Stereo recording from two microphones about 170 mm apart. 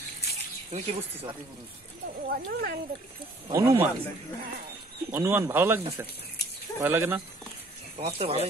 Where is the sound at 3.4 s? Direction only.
20° right (ahead or behind).